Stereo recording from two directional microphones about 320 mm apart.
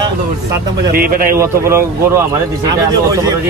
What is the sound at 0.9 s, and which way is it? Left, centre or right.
Speech, right.